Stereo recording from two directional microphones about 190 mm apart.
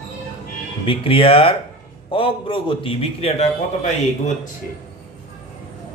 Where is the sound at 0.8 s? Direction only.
30° left (ahead or behind).